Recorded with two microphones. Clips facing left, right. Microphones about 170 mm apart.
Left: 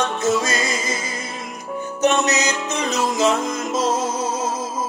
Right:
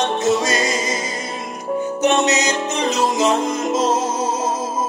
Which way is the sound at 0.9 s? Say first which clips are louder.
Right 4 dB; 40° right (ahead or behind).